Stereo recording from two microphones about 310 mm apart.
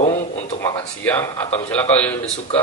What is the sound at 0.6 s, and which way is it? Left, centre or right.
Speech, centre.